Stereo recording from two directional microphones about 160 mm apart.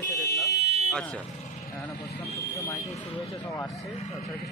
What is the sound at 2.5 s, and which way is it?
Speech, 20° left (ahead or behind).